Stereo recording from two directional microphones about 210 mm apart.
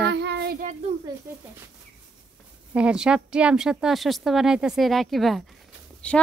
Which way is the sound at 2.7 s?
5° right (ahead or behind).